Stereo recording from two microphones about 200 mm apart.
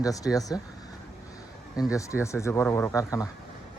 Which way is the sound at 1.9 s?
15° left (ahead or behind).